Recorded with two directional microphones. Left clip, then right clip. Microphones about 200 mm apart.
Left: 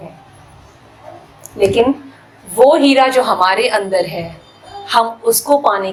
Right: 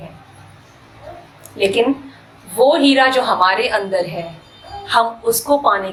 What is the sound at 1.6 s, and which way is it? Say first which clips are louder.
A woman's voice: left 3 dB; 20° left (ahead or behind).